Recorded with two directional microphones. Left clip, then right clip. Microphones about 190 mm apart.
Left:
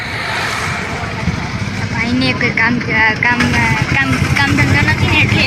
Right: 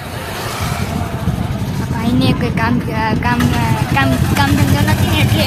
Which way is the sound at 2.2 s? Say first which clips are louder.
Left 4 dB; 20° right (ahead or behind).